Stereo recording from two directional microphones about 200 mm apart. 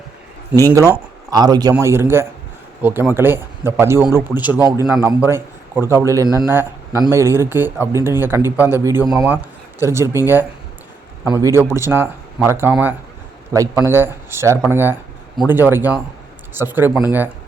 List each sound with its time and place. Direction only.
0.7 s speech: 15° right (ahead or behind)
4.6 s a man's voice: 20° left (ahead or behind)
5.0 s a man's voice: 10° right (ahead or behind)